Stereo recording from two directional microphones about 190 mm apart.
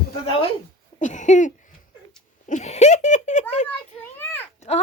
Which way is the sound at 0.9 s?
40° left (ahead or behind).